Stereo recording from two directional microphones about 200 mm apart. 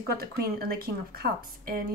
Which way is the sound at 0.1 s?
50° right (ahead or behind).